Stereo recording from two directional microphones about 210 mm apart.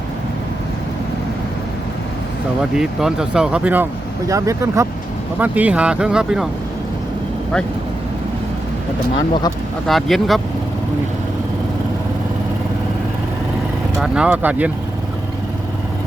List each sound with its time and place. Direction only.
2.7 s speech: 5° right (ahead or behind)
9.1 s speech: 20° left (ahead or behind)
9.8 s speech: centre (ahead or behind)
14.0 s speech: 5° right (ahead or behind)